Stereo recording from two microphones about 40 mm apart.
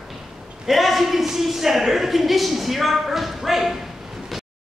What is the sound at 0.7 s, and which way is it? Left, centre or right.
A woman's voice, centre.